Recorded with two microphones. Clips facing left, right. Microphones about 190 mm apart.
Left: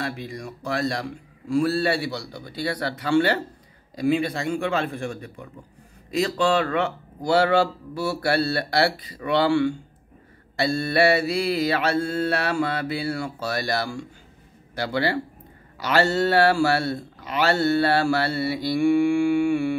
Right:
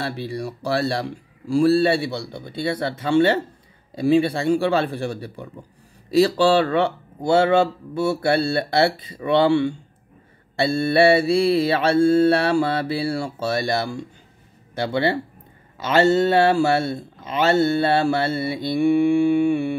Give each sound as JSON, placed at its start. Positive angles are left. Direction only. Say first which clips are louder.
{"t": 0.0, "sound": "speech", "louder": "right 4 dB", "side_deg": -30}